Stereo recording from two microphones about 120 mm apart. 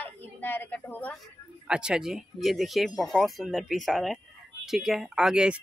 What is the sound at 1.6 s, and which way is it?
Speech, 5° right (ahead or behind).